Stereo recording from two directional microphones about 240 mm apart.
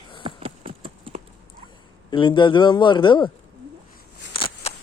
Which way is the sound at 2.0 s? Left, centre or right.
Centre.